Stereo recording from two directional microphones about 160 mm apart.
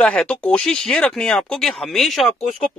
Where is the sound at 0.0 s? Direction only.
5° left (ahead or behind).